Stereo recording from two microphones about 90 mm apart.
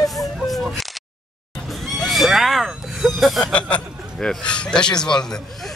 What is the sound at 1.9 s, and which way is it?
Neigh, centre (ahead or behind).